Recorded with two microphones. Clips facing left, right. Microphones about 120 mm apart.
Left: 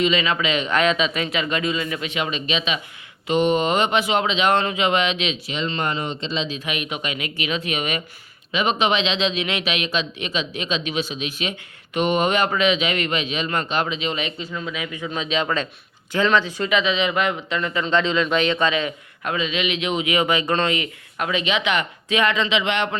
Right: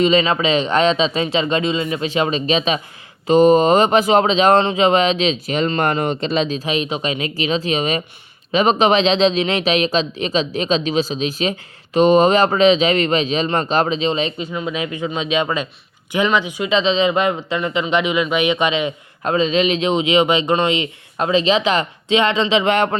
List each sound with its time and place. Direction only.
0.0 s a man's voice: 35° right (ahead or behind)
5.5 s a man's voice: 50° right (ahead or behind); by 16.6 s 15° right (ahead or behind)
16.6 s speech: 30° right (ahead or behind)